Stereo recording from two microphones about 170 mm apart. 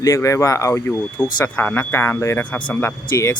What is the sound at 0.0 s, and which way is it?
Speech, 20° left (ahead or behind).